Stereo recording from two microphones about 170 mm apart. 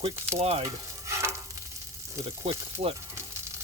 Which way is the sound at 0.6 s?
15° right (ahead or behind).